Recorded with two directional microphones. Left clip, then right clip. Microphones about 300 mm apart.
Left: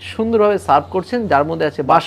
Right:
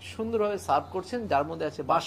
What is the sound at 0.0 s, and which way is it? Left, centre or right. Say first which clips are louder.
Speech: left 13 dB; left.